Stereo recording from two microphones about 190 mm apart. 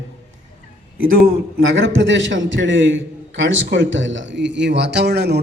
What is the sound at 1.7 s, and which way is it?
A man's voice, 75° right (ahead or behind).